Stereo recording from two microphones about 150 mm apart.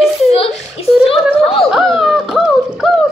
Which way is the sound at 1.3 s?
40° left (ahead or behind).